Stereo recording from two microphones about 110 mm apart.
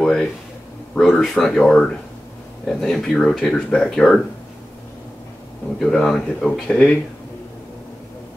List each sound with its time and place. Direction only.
0.0 s speech: 5° left (ahead or behind)
5.8 s speech: 5° left (ahead or behind)